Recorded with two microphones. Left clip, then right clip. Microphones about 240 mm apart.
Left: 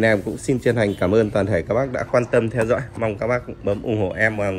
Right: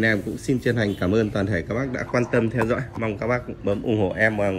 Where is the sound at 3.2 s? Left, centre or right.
Left.